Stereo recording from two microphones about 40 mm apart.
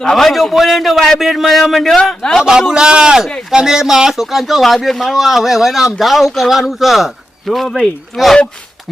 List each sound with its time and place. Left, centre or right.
0.0 s speech: centre
2.4 s speech: centre